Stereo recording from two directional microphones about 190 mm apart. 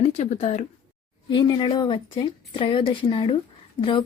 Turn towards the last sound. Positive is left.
turn(degrees=30)  # may be behind; listen again after turning